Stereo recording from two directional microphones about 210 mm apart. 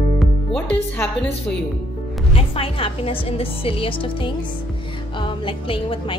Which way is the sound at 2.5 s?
25° left (ahead or behind).